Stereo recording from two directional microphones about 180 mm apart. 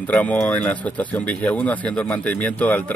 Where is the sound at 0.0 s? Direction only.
10° left (ahead or behind).